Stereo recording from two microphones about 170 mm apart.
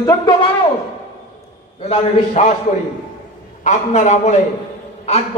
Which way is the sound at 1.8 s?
40° left (ahead or behind).